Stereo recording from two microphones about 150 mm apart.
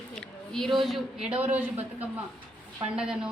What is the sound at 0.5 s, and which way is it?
Speech, centre (ahead or behind).